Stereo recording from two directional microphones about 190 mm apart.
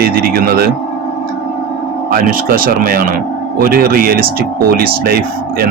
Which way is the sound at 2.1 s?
50° right (ahead or behind).